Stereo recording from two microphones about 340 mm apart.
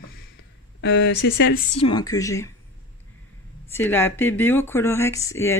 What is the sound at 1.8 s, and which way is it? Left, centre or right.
Speech, centre.